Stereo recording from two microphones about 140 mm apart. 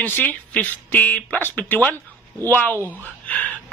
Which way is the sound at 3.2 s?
10° left (ahead or behind).